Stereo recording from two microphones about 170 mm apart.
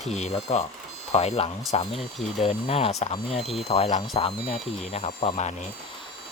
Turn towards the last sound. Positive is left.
turn(degrees=35)  # may be behind; listen again after turning